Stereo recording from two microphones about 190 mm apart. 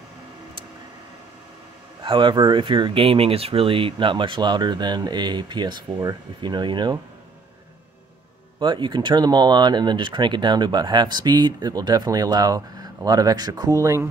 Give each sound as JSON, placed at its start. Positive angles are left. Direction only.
{"t": 2.0, "sound": "speech", "side_deg": -25}
{"t": 8.5, "sound": "speech", "side_deg": -25}